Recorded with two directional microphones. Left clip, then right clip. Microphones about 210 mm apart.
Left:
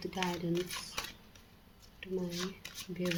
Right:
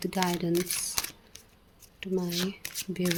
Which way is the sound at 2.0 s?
45° right (ahead or behind).